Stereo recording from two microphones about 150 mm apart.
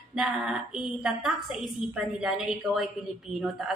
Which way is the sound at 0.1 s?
5° right (ahead or behind).